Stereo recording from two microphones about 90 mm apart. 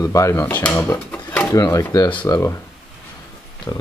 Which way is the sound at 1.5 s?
40° left (ahead or behind).